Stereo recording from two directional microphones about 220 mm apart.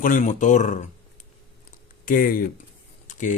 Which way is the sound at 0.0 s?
35° left (ahead or behind).